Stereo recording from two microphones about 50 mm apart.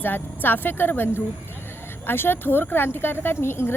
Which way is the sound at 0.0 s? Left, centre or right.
Left.